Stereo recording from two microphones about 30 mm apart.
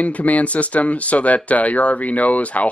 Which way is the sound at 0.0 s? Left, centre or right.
Left.